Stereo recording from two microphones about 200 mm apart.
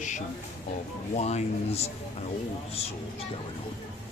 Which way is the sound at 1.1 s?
35° left (ahead or behind).